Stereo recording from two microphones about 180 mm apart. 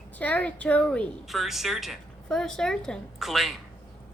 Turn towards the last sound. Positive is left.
turn(degrees=0)  # may be behind; listen again after turning